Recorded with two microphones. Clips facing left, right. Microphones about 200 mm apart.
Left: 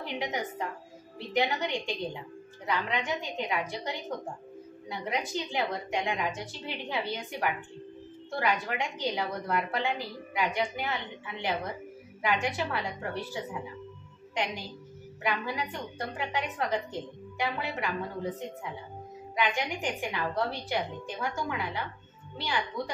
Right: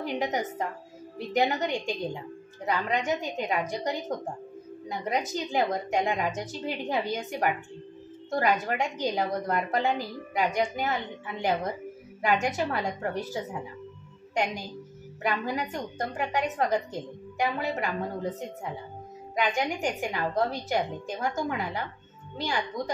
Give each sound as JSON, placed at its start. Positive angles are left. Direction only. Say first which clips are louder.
{"t": 0.0, "sound": "a woman's voice", "louder": "right 4 dB", "side_deg": -45}
{"t": 19.3, "sound": "a woman's voice", "louder": "right 3 dB", "side_deg": -45}